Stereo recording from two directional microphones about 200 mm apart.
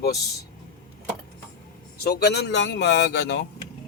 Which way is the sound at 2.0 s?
55° left (ahead or behind).